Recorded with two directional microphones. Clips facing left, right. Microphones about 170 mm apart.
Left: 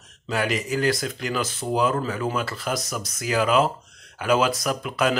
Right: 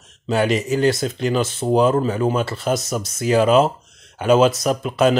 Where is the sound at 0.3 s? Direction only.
25° right (ahead or behind).